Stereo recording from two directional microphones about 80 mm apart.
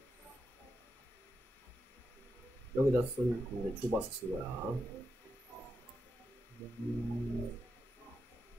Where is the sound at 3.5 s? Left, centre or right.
Left.